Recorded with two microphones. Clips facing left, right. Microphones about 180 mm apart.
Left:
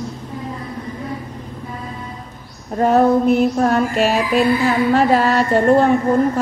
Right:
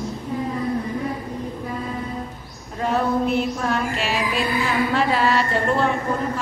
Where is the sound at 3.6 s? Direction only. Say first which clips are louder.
Left 8 dB; 45° left (ahead or behind).